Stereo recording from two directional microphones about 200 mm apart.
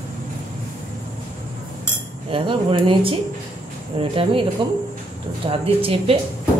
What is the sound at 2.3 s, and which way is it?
A woman's voice, 25° right (ahead or behind).